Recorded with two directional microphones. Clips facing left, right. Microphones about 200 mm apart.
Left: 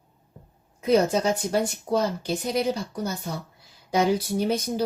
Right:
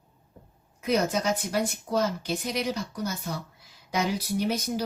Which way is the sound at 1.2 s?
30° left (ahead or behind).